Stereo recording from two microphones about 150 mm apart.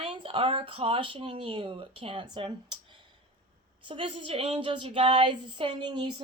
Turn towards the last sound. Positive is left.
turn(degrees=-30)  # may be behind; listen again after turning